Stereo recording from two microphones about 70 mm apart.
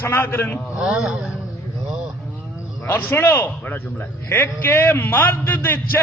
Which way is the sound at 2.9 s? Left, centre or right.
Left.